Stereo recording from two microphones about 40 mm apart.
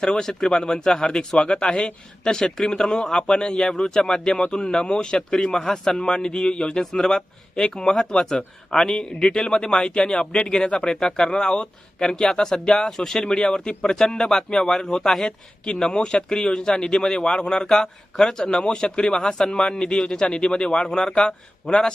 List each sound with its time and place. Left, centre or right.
0.0 s speech: centre